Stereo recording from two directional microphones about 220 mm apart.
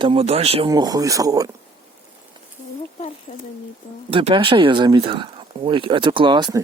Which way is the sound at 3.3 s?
40° left (ahead or behind).